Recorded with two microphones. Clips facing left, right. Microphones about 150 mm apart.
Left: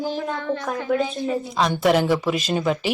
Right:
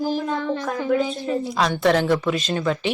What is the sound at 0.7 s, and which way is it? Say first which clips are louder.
Speech: right 1 dB; centre (ahead or behind).